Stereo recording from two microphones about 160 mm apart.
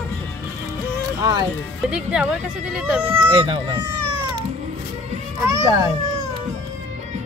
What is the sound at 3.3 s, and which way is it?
Speech, 30° right (ahead or behind).